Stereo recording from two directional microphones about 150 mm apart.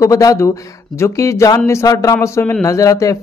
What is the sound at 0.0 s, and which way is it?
A man's voice, 20° left (ahead or behind).